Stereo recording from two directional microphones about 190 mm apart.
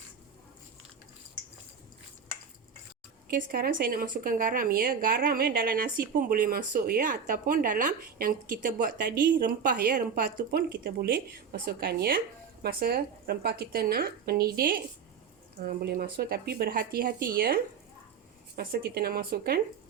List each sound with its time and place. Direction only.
3.2 s a woman's voice: 50° right (ahead or behind)